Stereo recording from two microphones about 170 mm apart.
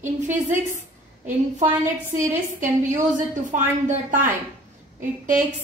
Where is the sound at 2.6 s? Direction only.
45° right (ahead or behind).